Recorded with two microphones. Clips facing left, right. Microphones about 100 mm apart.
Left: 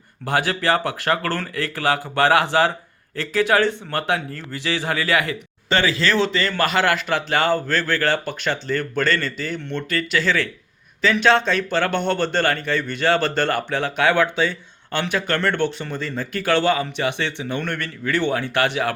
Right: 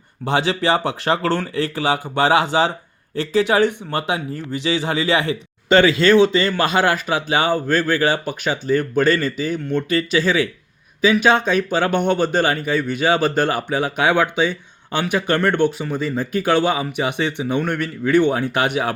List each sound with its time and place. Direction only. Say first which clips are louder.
0.3 s speech: right 2 dB; 20° right (ahead or behind)